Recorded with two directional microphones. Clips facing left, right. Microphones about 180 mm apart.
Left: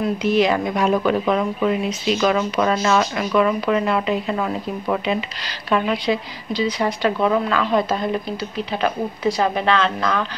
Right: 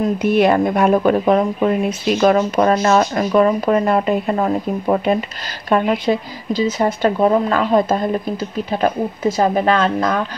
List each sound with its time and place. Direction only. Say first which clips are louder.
0.0 s speech: right 3 dB; 55° right (ahead or behind)